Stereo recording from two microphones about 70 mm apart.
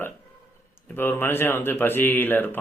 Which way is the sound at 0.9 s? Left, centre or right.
Left.